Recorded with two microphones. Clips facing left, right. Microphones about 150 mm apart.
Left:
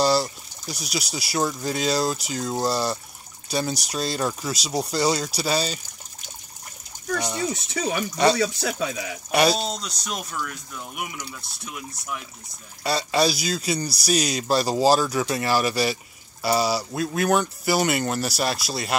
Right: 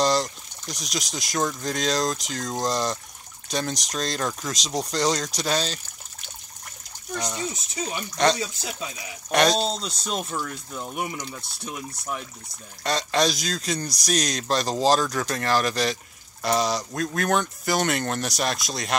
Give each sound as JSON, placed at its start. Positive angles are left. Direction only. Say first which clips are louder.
{"t": 0.0, "sound": "speech", "louder": "left 1 dB", "side_deg": 5}
{"t": 7.2, "sound": "speech", "louder": "left 1 dB", "side_deg": 10}
{"t": 8.4, "sound": "speech", "louder": "left 8 dB", "side_deg": 75}
{"t": 9.3, "sound": "speech", "louder": "even", "side_deg": 10}
{"t": 9.6, "sound": "speech", "louder": "right 3 dB", "side_deg": -30}
{"t": 12.8, "sound": "speech", "louder": "left 1 dB", "side_deg": 10}